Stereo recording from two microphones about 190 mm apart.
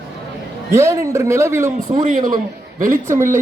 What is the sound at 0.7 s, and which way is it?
A man's voice, 15° right (ahead or behind).